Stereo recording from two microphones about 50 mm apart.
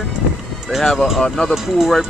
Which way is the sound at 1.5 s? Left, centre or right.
Centre.